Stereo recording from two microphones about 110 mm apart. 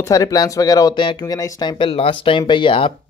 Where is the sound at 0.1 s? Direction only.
30° left (ahead or behind); by 2.9 s 50° left (ahead or behind).